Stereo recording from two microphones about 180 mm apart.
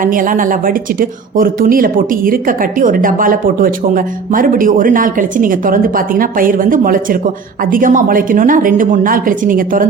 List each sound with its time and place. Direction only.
0.0 s speech: 50° right (ahead or behind)